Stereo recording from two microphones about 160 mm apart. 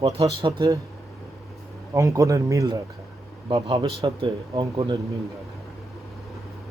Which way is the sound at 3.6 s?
40° right (ahead or behind).